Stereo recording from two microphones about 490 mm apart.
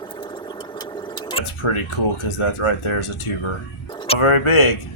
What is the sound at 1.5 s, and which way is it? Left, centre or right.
Speech, left.